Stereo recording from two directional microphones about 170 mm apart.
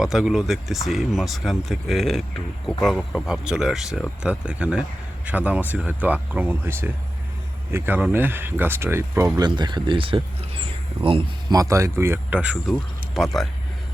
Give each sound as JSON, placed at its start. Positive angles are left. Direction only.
{"t": 0.0, "sound": "speech", "side_deg": -5}
{"t": 9.5, "sound": "speech", "side_deg": -25}